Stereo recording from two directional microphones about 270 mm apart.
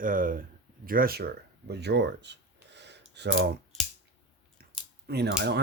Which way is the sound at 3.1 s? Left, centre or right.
Right.